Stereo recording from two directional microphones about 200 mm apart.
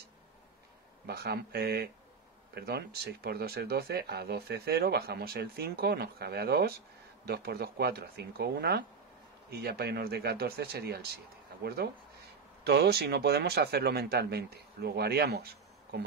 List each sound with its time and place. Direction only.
1.0 s speech: 55° right (ahead or behind)